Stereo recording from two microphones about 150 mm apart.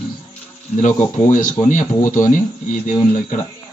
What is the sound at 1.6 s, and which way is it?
Speech, 60° left (ahead or behind).